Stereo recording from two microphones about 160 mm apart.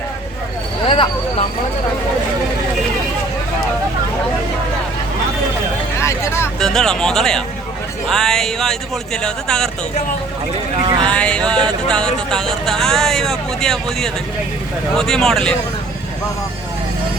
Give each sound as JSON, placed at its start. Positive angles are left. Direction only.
{"t": 0.9, "sound": "vehicle", "side_deg": 35}
{"t": 6.0, "sound": "vehicle", "side_deg": 15}
{"t": 6.6, "sound": "speech", "side_deg": 5}
{"t": 10.8, "sound": "speech", "side_deg": -30}
{"t": 11.1, "sound": "speech", "side_deg": 5}